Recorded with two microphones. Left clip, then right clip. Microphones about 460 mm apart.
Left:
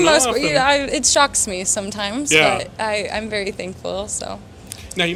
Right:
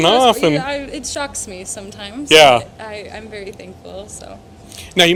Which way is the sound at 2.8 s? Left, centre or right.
Left.